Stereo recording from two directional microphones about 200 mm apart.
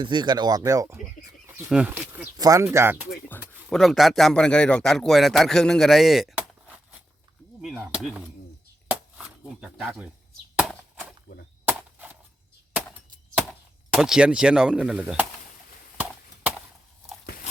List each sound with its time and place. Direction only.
0.0 s speech: 20° right (ahead or behind)
3.7 s a man's voice: centre (ahead or behind)
8.9 s a sound: 5° right (ahead or behind)
11.3 s speech: 60° left (ahead or behind)
11.7 s a sound: 10° right (ahead or behind)
13.5 s speech: centre (ahead or behind)